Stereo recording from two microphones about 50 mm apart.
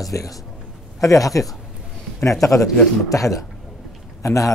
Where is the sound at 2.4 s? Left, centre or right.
Left.